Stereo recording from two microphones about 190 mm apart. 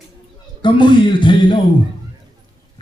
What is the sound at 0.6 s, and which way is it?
A man's voice, 25° left (ahead or behind).